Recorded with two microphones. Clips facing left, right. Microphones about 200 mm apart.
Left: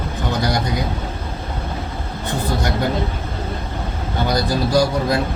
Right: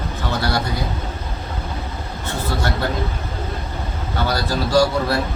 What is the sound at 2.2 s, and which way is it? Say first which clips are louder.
Speech: left 2 dB; 15° left (ahead or behind).